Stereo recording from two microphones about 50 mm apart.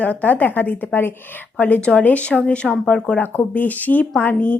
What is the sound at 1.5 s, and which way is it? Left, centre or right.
A woman's voice, left.